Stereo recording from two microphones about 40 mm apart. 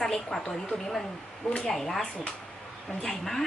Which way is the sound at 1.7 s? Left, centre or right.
Centre.